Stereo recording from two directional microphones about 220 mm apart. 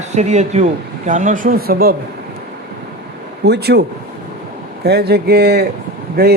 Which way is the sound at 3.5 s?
45° right (ahead or behind).